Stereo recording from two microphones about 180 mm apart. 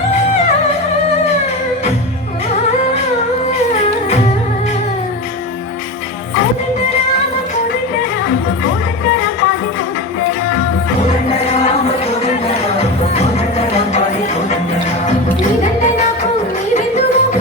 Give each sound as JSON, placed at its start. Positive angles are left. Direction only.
{"t": 16.7, "sound": "music", "side_deg": 40}